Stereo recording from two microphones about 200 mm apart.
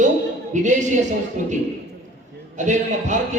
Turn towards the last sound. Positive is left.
turn(degrees=-35)  # may be behind; listen again after turning